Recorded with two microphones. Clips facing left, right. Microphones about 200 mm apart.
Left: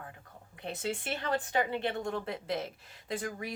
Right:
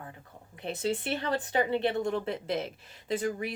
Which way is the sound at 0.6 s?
20° right (ahead or behind).